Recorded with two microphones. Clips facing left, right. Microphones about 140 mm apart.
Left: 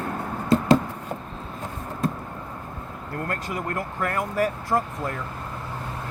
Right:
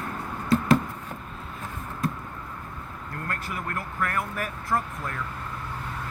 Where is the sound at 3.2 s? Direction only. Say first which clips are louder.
Left 5 dB; 25° left (ahead or behind).